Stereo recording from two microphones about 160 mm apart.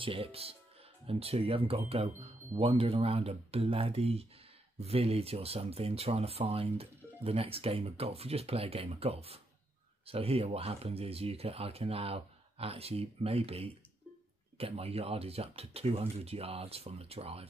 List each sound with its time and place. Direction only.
0.0 s speech: 35° right (ahead or behind)